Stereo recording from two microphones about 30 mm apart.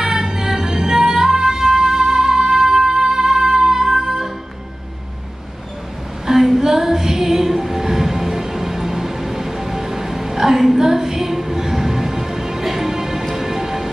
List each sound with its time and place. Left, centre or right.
0.0 s music: centre
6.2 s child singing: centre
10.8 s music: centre